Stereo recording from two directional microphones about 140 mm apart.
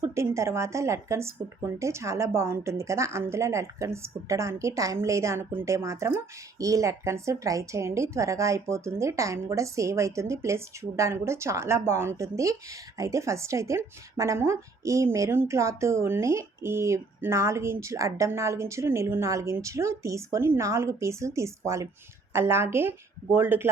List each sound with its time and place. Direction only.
0.0 s speech: 20° right (ahead or behind)